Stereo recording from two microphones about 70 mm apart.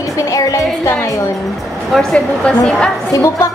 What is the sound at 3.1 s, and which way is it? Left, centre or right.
Speech, left.